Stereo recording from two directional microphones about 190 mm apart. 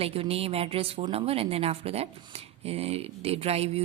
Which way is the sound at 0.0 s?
30° right (ahead or behind).